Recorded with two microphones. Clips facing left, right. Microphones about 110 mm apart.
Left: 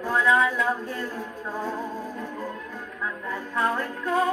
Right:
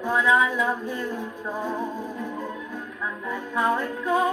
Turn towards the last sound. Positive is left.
turn(degrees=0)  # may be behind; listen again after turning